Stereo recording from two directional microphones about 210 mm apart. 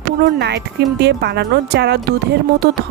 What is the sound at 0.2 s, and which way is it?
Speech, 50° right (ahead or behind).